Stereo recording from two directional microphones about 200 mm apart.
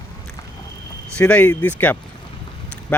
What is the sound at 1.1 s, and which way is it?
Speech, 5° left (ahead or behind).